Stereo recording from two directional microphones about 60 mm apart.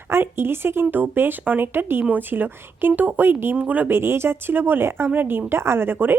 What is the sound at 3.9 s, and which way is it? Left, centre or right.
Speech, right.